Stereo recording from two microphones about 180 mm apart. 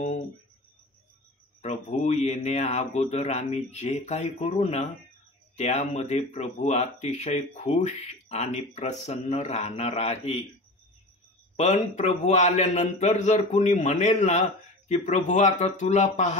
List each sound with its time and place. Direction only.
1.6 s a man's voice: 40° left (ahead or behind)
11.5 s a man's voice: 40° left (ahead or behind)